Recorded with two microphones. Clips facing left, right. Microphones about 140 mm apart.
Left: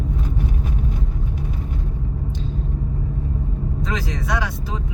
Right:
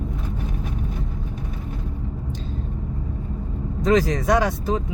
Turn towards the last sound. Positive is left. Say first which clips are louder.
# right 6 dB
turn(degrees=-45)  # may be behind; listen again after turning